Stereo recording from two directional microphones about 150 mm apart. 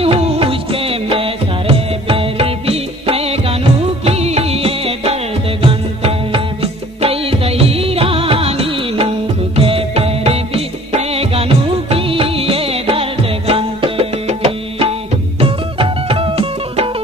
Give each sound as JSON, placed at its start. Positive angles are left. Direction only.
{"t": 0.0, "sound": "music", "side_deg": -40}